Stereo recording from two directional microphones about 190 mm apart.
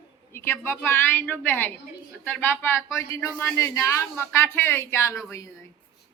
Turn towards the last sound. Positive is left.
turn(degrees=15)  # may be behind; listen again after turning